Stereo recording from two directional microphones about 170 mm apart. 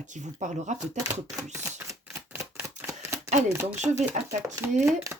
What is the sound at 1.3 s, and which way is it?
Typewriter, 15° right (ahead or behind).